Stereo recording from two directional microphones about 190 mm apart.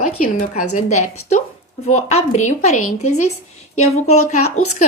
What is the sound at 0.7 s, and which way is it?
A woman's voice, 40° left (ahead or behind).